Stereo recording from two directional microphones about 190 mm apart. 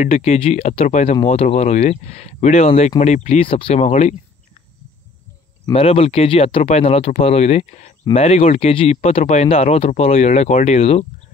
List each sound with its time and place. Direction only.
0.0 s speech: 35° left (ahead or behind)
5.7 s speech: 30° left (ahead or behind)